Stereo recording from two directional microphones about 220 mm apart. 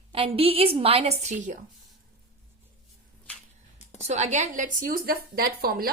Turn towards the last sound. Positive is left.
turn(degrees=-40)  # may be behind; listen again after turning